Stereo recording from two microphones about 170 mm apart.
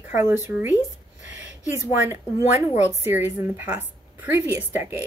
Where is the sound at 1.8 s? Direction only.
15° right (ahead or behind).